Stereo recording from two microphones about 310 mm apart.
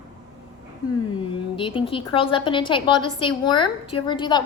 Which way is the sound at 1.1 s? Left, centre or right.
Centre.